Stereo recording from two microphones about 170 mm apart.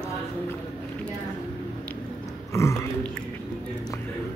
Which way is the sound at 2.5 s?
15° left (ahead or behind).